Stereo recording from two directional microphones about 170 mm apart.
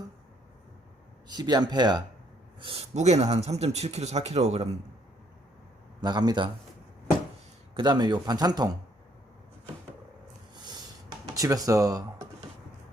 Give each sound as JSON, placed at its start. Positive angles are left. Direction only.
{"t": 1.3, "sound": "speech", "side_deg": -25}
{"t": 2.9, "sound": "speech", "side_deg": -40}
{"t": 6.0, "sound": "speech", "side_deg": -25}
{"t": 7.7, "sound": "speech", "side_deg": -25}
{"t": 10.5, "sound": "a sound", "side_deg": -25}
{"t": 11.3, "sound": "speech", "side_deg": -20}